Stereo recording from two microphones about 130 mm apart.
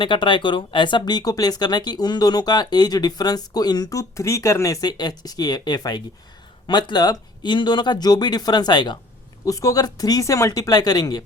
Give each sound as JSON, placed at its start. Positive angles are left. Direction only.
{"t": 0.0, "sound": "speech", "side_deg": 40}